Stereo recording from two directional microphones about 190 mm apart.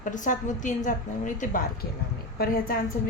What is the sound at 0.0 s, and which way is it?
A woman's voice, 40° left (ahead or behind).